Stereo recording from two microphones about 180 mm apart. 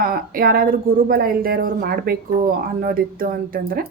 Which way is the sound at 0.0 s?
55° right (ahead or behind).